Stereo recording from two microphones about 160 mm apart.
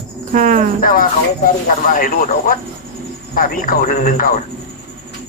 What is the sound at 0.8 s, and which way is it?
Speech, 60° left (ahead or behind).